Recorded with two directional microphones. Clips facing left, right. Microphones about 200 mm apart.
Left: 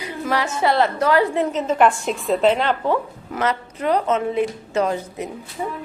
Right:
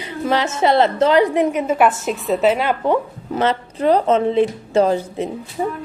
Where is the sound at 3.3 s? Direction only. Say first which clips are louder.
Right 4 dB; 30° right (ahead or behind).